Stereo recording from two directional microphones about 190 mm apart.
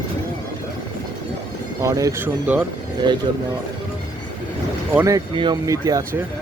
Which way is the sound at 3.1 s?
25° right (ahead or behind).